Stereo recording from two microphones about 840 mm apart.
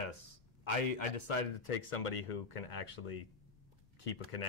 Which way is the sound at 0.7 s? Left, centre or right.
Left.